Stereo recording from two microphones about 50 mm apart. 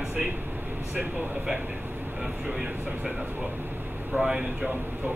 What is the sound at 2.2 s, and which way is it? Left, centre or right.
Speech, centre.